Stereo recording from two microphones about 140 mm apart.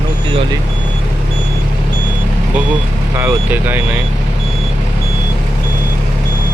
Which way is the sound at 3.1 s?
15° right (ahead or behind).